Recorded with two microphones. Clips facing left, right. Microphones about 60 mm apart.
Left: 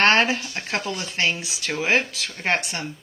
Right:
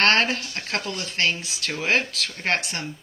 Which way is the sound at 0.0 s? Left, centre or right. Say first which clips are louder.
Left 2 dB; centre.